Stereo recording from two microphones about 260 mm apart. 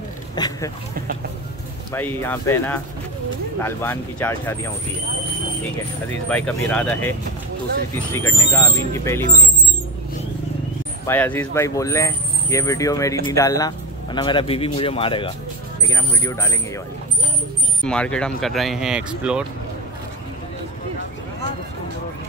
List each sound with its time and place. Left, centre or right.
0.4 s speech: centre
1.9 s speech: centre
6.2 s speech: centre
11.1 s speech: centre
17.8 s speech: centre